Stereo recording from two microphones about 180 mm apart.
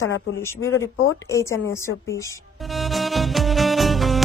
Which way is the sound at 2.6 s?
Centre (ahead or behind).